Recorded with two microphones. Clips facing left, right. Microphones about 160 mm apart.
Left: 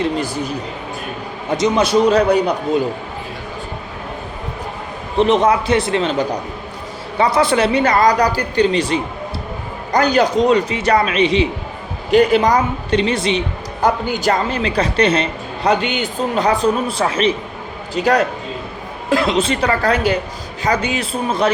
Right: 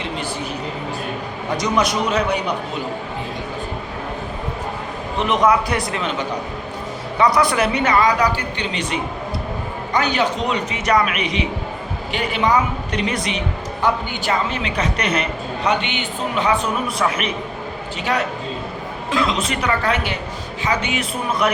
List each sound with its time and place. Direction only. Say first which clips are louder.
0.0 s a woman's voice: left 6 dB; 40° left (ahead or behind)
1.5 s speech: left 6 dB; 25° left (ahead or behind)
5.1 s a woman's voice: left 3 dB; 30° left (ahead or behind)
12.1 s speech: left 7 dB; 40° left (ahead or behind)
13.8 s a woman's voice: left 5 dB; 40° left (ahead or behind)
17.9 s a woman's voice: left 7 dB; 40° left (ahead or behind)